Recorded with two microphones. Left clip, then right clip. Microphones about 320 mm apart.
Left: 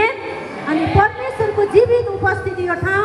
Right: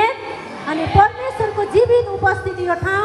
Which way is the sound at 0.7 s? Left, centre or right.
Right.